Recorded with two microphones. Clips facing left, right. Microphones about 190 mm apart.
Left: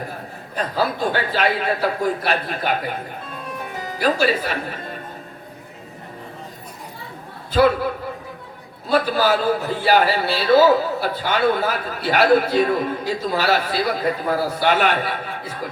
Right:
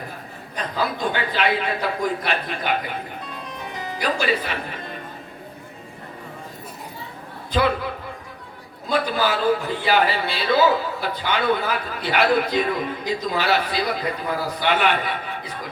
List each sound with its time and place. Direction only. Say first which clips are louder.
0.5 s a man's voice: left 3 dB; 40° left (ahead or behind)
4.0 s a man's voice: left 4 dB; 40° left (ahead or behind)
8.9 s a man's voice: left 4 dB; 45° left (ahead or behind)